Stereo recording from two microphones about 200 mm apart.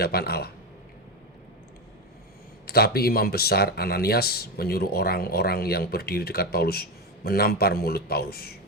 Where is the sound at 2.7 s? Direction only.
50° left (ahead or behind).